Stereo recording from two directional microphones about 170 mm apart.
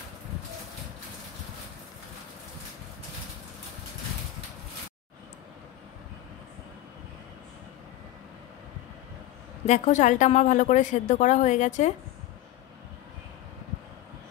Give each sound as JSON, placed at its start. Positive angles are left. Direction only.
{"t": 9.7, "sound": "a woman's voice", "side_deg": 45}